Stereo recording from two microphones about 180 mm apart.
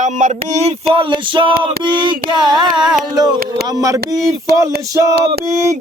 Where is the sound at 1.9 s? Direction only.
25° right (ahead or behind).